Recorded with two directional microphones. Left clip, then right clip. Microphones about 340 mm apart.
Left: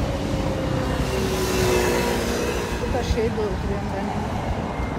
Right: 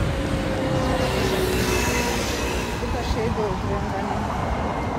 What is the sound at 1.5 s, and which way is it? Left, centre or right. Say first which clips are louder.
Music: left 2 dB; centre.